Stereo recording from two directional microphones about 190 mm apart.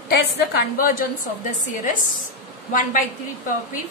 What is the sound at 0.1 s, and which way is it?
Speech, 55° left (ahead or behind).